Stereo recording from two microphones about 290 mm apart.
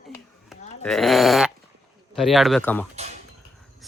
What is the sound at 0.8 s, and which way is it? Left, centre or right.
Speech, centre.